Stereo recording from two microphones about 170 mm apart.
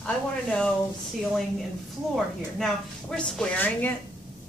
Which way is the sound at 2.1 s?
Centre (ahead or behind).